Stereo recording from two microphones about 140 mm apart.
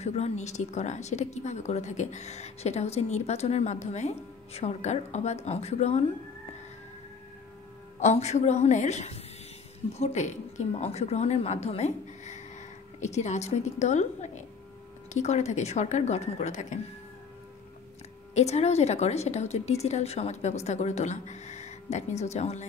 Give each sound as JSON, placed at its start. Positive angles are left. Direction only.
{"t": 0.0, "sound": "speech", "side_deg": 50}
{"t": 8.0, "sound": "a woman's voice", "side_deg": 50}
{"t": 18.3, "sound": "speech", "side_deg": 50}